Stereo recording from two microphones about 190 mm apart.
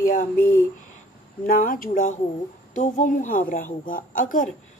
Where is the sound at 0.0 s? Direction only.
45° left (ahead or behind).